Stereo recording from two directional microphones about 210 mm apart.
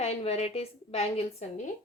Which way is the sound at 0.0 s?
30° left (ahead or behind).